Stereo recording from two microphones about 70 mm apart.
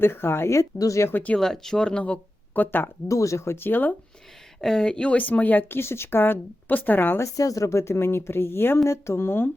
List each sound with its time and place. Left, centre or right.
0.0 s a woman's voice: left
1.4 s speech: centre
2.6 s speech: left
3.1 s a woman's voice: left
4.6 s speech: centre; by 7.3 s left
7.3 s a woman's voice: left